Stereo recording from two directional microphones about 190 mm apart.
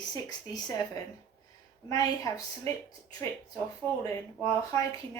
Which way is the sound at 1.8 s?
20° left (ahead or behind).